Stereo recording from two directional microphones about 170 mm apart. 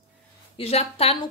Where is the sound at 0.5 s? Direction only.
35° left (ahead or behind).